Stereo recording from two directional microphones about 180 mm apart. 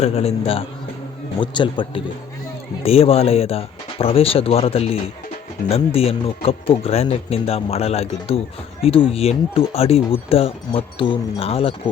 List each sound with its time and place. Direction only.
0.0 s speech: 35° left (ahead or behind)